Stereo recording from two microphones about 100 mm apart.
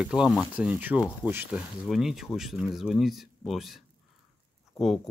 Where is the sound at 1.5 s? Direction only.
5° right (ahead or behind).